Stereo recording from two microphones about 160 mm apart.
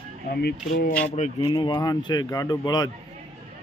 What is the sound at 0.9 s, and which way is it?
Speech, 10° left (ahead or behind).